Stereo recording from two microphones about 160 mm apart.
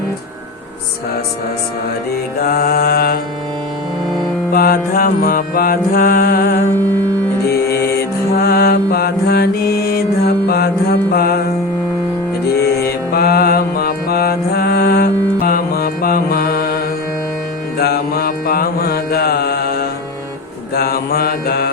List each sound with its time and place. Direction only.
2.4 s mantra: 70° left (ahead or behind)
4.5 s music: 65° left (ahead or behind)
7.4 s mantra: 75° left (ahead or behind)
12.5 s music: 80° left
20.7 s mantra: 70° left (ahead or behind)